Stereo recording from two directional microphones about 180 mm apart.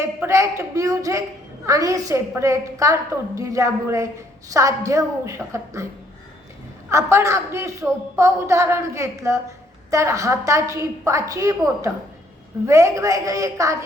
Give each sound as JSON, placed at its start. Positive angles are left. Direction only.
{"t": 0.0, "sound": "a woman's voice", "side_deg": -15}
{"t": 6.9, "sound": "a woman's voice", "side_deg": -15}